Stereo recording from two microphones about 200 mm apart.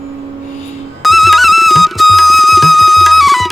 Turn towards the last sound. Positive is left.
turn(degrees=0)  # may be behind; listen again after turning